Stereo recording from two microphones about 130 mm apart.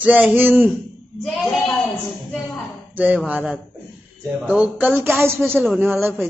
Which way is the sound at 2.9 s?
10° right (ahead or behind).